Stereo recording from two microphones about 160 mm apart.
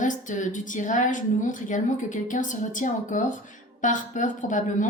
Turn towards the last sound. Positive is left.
turn(degrees=55)  # may be behind; listen again after turning